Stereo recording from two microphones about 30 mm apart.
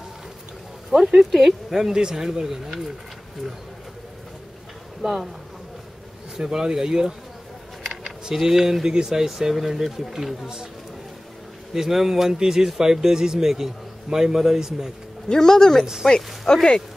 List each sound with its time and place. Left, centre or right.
0.8 s speech: centre
2.0 s speech: right
5.0 s speech: centre
6.3 s speech: centre
8.0 s a sound: centre
8.8 s speech: centre
10.4 s speech: right
11.7 s speech: centre
15.2 s speech: centre
15.8 s speech: centre
16.5 s speech: left